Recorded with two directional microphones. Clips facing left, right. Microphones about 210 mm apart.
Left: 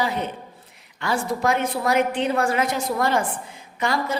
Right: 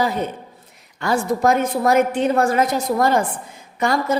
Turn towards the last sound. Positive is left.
turn(degrees=-45)  # may be behind; listen again after turning